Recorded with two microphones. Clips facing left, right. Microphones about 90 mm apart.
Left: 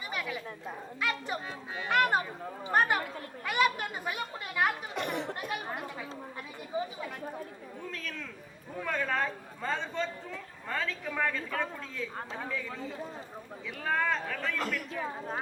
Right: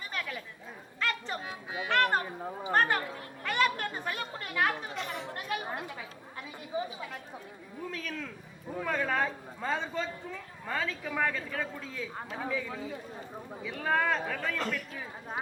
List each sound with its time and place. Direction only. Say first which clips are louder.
0.1 s chatter: left 2 dB; 10° left (ahead or behind)
1.5 s speech: right 1 dB; 10° right (ahead or behind)
1.9 s speech: left 1 dB; 10° left (ahead or behind)
3.4 s a sound: left 1 dB; 10° left (ahead or behind)
4.9 s speech: left 4 dB; 60° left (ahead or behind)
7.9 s a man's voice: right 3 dB; 5° right (ahead or behind)